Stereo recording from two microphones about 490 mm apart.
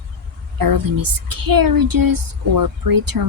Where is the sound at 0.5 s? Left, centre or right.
Right.